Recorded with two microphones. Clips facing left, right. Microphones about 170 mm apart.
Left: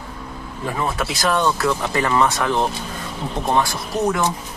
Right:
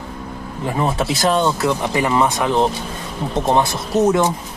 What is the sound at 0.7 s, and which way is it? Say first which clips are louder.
Speech: right 4 dB; 25° right (ahead or behind).